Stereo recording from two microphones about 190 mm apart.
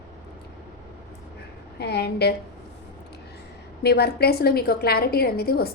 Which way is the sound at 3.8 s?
60° left (ahead or behind).